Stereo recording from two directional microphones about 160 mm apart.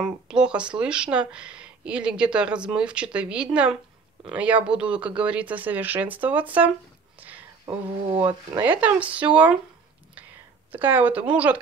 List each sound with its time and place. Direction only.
0.0 s speech: 5° right (ahead or behind)
7.2 s a sound: 10° right (ahead or behind)
7.6 s speech: 30° right (ahead or behind)
8.5 s speech: 10° right (ahead or behind)
10.7 s speech: 10° right (ahead or behind)